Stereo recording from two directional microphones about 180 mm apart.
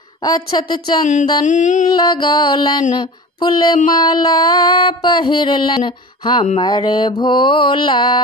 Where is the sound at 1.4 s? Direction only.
45° left (ahead or behind).